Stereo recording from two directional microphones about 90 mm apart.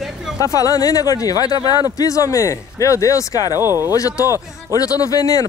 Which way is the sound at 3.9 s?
40° left (ahead or behind).